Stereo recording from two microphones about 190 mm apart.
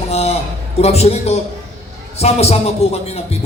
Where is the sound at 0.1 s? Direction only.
35° left (ahead or behind).